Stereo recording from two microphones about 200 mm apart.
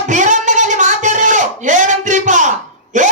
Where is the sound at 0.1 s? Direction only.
40° right (ahead or behind).